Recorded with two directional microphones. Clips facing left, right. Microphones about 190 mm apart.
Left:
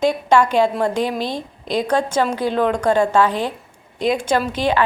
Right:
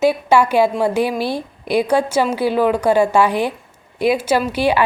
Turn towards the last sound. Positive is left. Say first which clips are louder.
# right 2 dB
turn(degrees=-10)  # may be behind; listen again after turning